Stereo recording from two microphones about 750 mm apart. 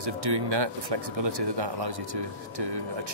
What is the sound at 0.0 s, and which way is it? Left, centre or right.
A man's voice, right.